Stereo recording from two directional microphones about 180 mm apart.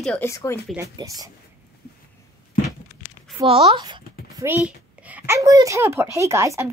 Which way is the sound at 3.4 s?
30° right (ahead or behind).